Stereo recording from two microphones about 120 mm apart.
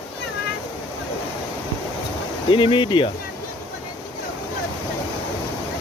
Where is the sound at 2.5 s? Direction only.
45° left (ahead or behind).